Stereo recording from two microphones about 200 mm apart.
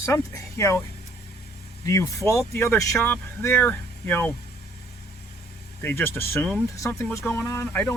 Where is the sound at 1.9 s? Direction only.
15° left (ahead or behind).